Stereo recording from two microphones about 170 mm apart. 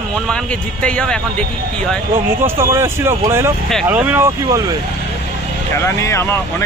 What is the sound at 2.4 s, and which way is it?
Speech, 15° right (ahead or behind).